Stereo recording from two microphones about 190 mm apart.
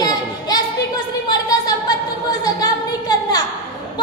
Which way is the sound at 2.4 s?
20° left (ahead or behind).